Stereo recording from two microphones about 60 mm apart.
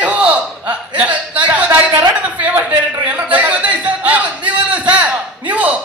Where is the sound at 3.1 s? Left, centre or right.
Right.